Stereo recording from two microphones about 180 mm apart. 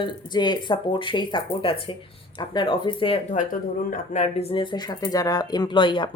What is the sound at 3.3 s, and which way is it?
Speech, 45° left (ahead or behind).